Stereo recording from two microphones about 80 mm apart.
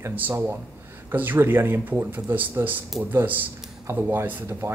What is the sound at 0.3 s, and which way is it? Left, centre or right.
Speech, right.